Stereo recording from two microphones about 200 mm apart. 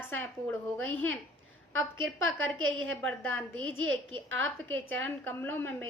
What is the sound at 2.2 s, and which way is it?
Speech, 80° right.